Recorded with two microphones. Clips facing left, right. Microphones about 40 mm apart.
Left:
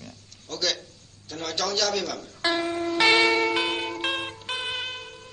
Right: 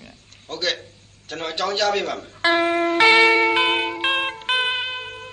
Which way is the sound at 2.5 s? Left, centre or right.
Right.